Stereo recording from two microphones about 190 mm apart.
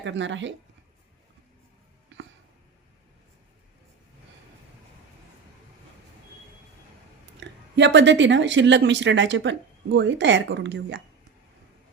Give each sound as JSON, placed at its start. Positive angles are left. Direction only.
{"t": 0.0, "sound": "speech", "side_deg": -75}
{"t": 7.3, "sound": "speech", "side_deg": -65}